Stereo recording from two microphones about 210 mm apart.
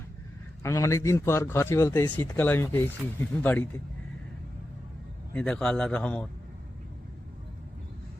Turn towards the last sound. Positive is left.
turn(degrees=5)  # may be behind; listen again after turning